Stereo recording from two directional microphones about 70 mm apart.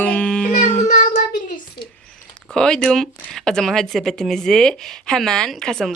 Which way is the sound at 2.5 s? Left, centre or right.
Centre.